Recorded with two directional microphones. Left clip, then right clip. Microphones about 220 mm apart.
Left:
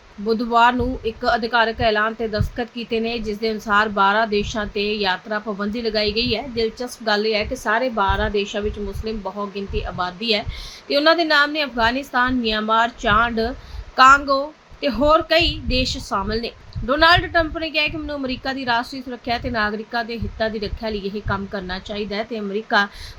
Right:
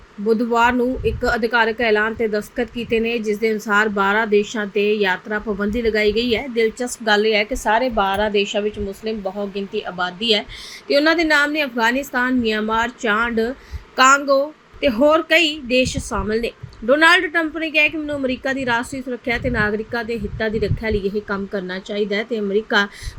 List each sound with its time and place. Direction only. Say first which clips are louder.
0.5 s speech: left 2 dB; 10° left (ahead or behind)
1.5 s a woman's voice: right 3 dB; 5° right (ahead or behind)
2.9 s speech: right 4 dB; 10° left (ahead or behind)
3.7 s a woman's voice: left 2 dB; 5° right (ahead or behind)
6.1 s a woman's voice: right 3 dB; 30° left (ahead or behind)
6.7 s a woman's voice: right 3 dB; 15° right (ahead or behind)
15.4 s a woman's voice: right 3 dB; 35° left (ahead or behind)
16.0 s a woman's voice: right 1 dB; centre (ahead or behind)